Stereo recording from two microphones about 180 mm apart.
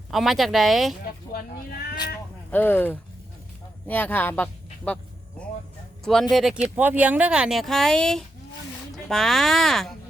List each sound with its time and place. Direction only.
0.1 s speech: centre (ahead or behind)
1.3 s speech: 55° left (ahead or behind)
2.5 s speech: 10° left (ahead or behind)
6.3 s speech: 5° right (ahead or behind)